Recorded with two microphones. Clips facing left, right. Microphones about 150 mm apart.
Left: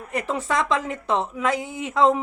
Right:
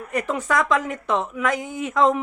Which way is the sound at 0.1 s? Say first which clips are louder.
Right 2 dB; 30° left (ahead or behind).